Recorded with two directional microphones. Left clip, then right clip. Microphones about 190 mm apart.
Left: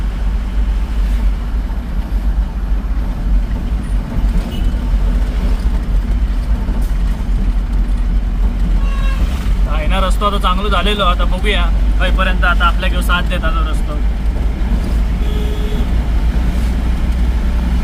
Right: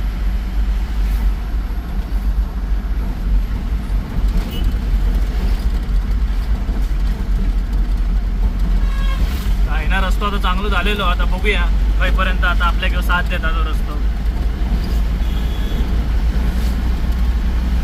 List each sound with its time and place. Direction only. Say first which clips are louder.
9.7 s speech: left 3 dB; 15° left (ahead or behind)